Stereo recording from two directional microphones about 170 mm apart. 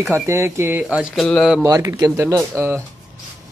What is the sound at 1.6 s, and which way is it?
Speech, 20° right (ahead or behind).